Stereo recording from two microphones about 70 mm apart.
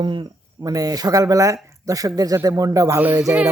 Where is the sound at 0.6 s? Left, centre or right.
Right.